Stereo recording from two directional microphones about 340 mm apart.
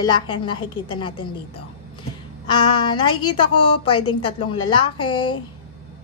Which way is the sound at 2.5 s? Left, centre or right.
Centre.